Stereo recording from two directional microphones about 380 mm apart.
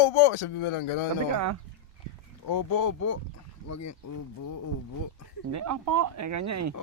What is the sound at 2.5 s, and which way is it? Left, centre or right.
Speech, left.